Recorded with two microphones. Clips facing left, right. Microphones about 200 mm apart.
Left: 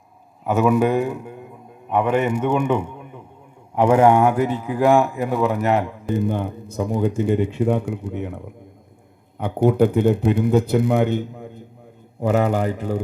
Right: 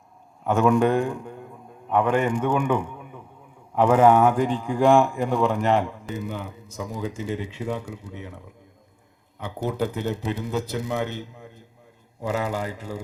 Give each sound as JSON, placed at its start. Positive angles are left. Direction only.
{"t": 0.4, "sound": "a man's voice", "side_deg": 5}
{"t": 3.0, "sound": "a sound", "side_deg": 10}
{"t": 3.8, "sound": "a man's voice", "side_deg": 10}
{"t": 6.1, "sound": "a man's voice", "side_deg": 55}